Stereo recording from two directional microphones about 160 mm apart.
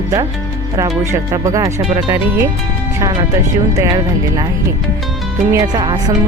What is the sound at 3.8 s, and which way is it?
Speech, 20° right (ahead or behind).